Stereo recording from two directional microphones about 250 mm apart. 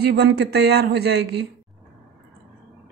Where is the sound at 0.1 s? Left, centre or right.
Right.